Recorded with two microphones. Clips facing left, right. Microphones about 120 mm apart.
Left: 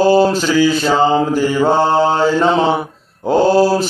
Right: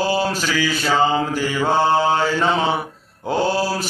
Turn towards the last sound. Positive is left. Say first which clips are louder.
# left 8 dB
turn(degrees=35)  # may be behind; listen again after turning